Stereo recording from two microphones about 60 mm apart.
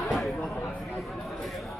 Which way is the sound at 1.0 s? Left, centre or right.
Centre.